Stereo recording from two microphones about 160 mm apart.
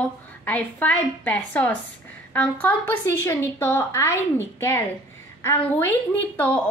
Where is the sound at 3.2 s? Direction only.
15° left (ahead or behind).